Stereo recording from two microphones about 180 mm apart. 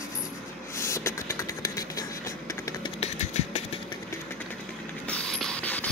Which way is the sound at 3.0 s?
40° left (ahead or behind).